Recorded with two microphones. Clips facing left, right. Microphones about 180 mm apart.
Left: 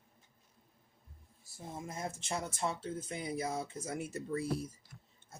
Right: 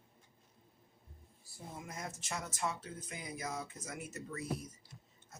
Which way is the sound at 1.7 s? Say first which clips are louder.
Left 5 dB; 30° left (ahead or behind).